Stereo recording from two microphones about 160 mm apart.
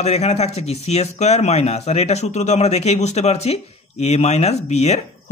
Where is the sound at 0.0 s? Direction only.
45° left (ahead or behind).